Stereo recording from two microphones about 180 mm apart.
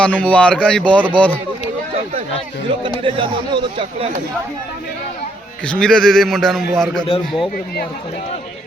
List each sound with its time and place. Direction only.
0.0 s speech: 10° left (ahead or behind)
2.8 s speech: 30° right (ahead or behind)
5.6 s a man's voice: 5° left (ahead or behind)
7.1 s a man's voice: 25° left (ahead or behind)